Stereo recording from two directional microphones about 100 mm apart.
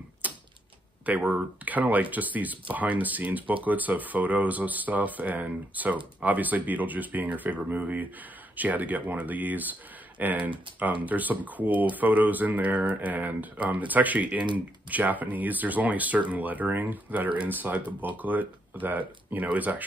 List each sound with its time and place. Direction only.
0.2 s typewriter: 15° right (ahead or behind)
1.0 s speech: 15° right (ahead or behind)